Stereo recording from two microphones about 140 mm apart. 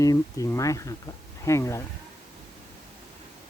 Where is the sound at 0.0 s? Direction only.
25° left (ahead or behind).